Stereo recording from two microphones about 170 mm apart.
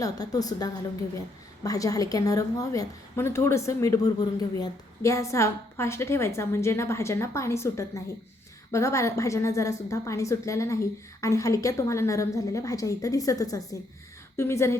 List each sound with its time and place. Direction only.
0.0 s a woman's voice: 20° left (ahead or behind)